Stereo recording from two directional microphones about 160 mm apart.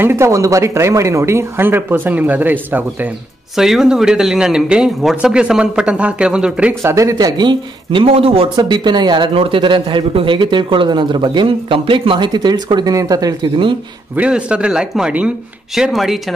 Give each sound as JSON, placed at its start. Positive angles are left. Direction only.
{"t": 0.0, "sound": "speech", "side_deg": -15}
{"t": 14.1, "sound": "speech", "side_deg": -5}